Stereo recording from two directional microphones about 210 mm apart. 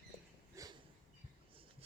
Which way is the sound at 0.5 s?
15° right (ahead or behind).